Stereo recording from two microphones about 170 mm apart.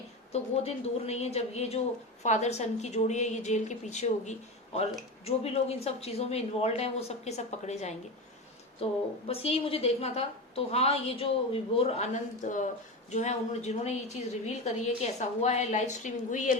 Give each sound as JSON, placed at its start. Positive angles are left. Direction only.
{"t": 0.5, "sound": "a woman's voice", "side_deg": 40}